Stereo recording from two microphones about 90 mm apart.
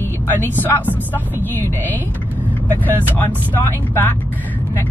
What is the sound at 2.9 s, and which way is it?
Speech, 20° left (ahead or behind).